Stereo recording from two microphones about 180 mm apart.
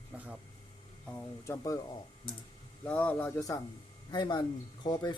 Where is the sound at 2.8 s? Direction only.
5° left (ahead or behind).